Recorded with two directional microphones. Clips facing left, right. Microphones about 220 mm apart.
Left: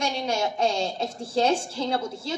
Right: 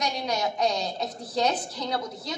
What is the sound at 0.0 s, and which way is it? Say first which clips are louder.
A woman's voice: left 2 dB; 25° left (ahead or behind).